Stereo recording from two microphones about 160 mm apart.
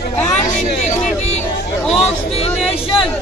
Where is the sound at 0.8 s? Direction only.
45° left (ahead or behind).